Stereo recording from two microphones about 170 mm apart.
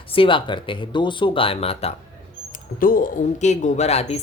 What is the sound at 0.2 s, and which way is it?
Speech, 30° left (ahead or behind).